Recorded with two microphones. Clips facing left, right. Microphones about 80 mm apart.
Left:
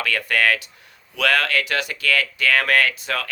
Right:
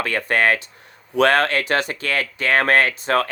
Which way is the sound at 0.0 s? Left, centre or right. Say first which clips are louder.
Right 2 dB; right.